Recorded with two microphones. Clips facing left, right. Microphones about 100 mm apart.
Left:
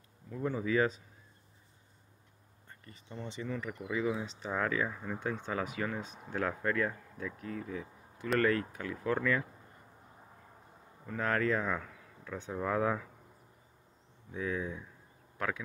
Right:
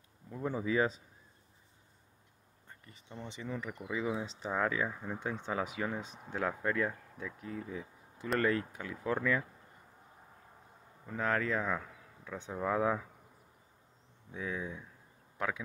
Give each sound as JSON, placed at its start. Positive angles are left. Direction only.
{"t": 0.3, "sound": "speech", "side_deg": -15}
{"t": 2.9, "sound": "speech", "side_deg": -15}
{"t": 11.1, "sound": "speech", "side_deg": -10}
{"t": 14.3, "sound": "speech", "side_deg": -5}
{"t": 15.3, "sound": "speech", "side_deg": -15}